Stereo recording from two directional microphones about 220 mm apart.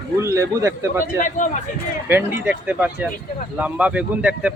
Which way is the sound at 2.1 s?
10° right (ahead or behind).